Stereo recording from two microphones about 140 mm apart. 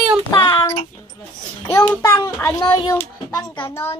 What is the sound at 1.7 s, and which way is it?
Speech, 15° left (ahead or behind).